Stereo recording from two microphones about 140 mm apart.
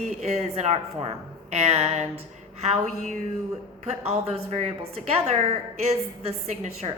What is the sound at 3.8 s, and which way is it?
A woman's voice, 50° right (ahead or behind).